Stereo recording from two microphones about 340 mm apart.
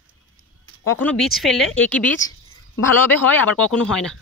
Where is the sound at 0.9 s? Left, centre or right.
Centre.